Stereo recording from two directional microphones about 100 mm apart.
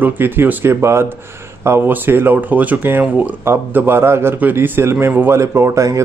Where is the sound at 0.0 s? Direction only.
20° right (ahead or behind).